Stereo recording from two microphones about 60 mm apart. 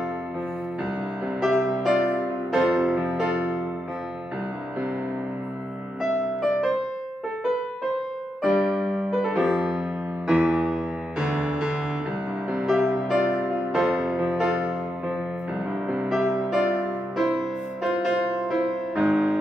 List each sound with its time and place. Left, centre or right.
1.4 s music: centre
3.1 s music: centre
8.5 s music: centre
11.1 s music: centre
12.5 s music: centre
15.9 s music: centre
18.9 s music: centre